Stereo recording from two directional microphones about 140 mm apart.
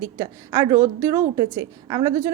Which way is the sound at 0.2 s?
25° right (ahead or behind).